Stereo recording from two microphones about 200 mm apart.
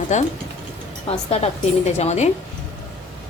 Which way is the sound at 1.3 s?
30° left (ahead or behind).